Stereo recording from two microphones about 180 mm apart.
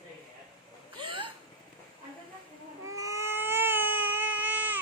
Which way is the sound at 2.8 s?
15° right (ahead or behind).